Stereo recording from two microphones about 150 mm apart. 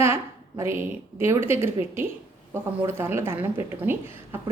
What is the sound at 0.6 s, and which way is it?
A woman's voice, 15° right (ahead or behind).